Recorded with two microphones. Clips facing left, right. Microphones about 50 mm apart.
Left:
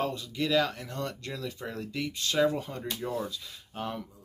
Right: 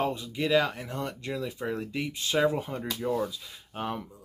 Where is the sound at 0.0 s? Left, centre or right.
Centre.